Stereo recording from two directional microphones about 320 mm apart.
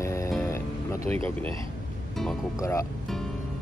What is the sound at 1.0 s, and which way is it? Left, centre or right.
Speech, centre.